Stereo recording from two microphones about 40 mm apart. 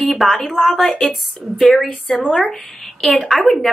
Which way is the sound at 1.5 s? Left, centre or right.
Centre.